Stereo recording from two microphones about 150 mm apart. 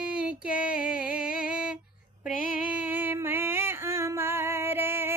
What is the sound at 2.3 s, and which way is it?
Female singing, 65° left (ahead or behind).